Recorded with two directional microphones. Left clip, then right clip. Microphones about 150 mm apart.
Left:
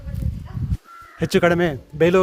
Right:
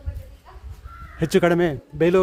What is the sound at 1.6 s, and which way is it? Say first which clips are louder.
Speech: left 2 dB; 5° left (ahead or behind).